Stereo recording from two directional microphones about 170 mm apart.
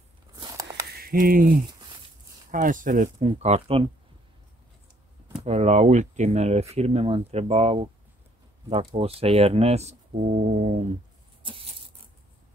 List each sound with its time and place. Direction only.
0.4 s a sound: 20° right (ahead or behind)
0.9 s speech: 60° right (ahead or behind)
1.7 s a sound: 25° right (ahead or behind)
2.5 s speech: 50° right (ahead or behind)
3.3 s speech: 35° right (ahead or behind)
5.3 s speech: 40° right (ahead or behind)